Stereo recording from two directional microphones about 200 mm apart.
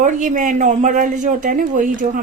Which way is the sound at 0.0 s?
40° right (ahead or behind).